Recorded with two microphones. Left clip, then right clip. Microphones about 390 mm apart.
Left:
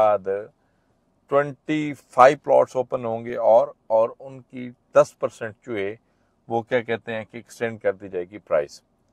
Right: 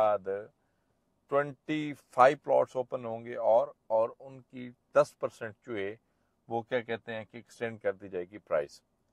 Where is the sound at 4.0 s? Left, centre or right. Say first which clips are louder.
Left 9 dB; left; by 8.8 s centre.